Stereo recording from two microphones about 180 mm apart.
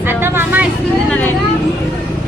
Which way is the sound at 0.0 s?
10° right (ahead or behind).